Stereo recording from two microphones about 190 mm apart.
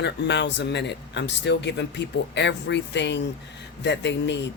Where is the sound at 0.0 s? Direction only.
65° left (ahead or behind).